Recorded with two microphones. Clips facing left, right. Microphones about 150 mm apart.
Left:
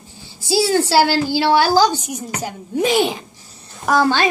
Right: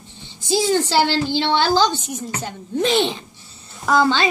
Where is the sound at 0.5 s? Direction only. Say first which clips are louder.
Left 2 dB; 10° left (ahead or behind).